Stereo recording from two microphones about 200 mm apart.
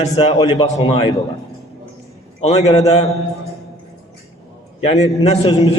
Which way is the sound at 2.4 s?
35° left (ahead or behind).